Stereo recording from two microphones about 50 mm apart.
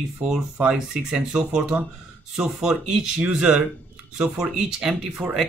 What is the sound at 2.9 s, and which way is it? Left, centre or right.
Speech, centre.